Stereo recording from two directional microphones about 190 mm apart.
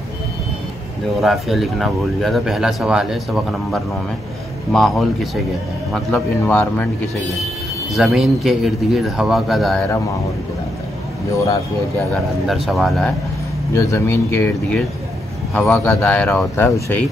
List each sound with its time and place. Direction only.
1.2 s a man's voice: centre (ahead or behind)
7.9 s speech: centre (ahead or behind)
11.3 s a man's voice: 15° left (ahead or behind)
12.1 s speech: centre (ahead or behind)
13.7 s a man's voice: 15° left (ahead or behind)